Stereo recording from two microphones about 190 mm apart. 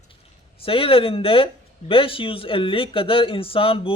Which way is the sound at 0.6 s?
30° left (ahead or behind).